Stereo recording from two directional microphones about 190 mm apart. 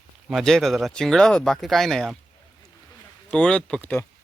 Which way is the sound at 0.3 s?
Centre (ahead or behind).